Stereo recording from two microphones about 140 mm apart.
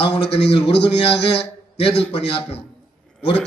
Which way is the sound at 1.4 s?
45° left (ahead or behind).